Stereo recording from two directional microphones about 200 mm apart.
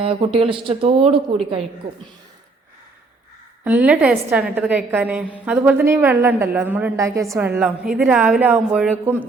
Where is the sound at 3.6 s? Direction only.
5° right (ahead or behind).